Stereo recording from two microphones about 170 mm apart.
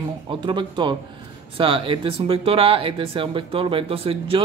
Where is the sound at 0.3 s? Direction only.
30° right (ahead or behind).